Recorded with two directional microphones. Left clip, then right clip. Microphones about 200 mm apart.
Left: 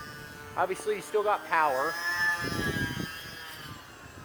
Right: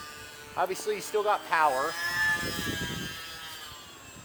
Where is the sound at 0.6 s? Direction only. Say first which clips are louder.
Even; 25° right (ahead or behind).